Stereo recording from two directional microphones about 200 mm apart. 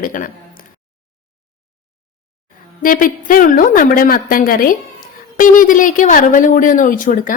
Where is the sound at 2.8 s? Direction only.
45° left (ahead or behind).